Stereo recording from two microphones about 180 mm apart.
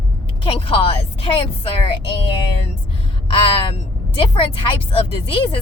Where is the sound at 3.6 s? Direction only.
30° left (ahead or behind).